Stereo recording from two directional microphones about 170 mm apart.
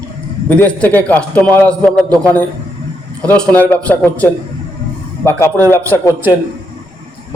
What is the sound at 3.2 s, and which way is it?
A man's voice, 5° left (ahead or behind).